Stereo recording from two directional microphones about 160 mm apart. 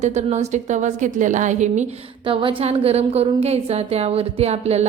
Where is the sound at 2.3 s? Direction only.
40° right (ahead or behind).